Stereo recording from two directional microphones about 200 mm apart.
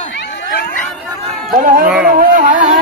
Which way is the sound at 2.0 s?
40° right (ahead or behind).